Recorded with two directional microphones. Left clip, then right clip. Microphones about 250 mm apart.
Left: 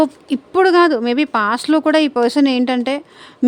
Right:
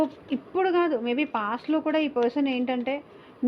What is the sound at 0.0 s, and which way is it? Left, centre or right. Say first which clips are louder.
Speech: left 10 dB; left.